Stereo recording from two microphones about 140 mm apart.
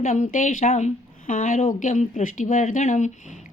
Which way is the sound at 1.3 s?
65° left (ahead or behind).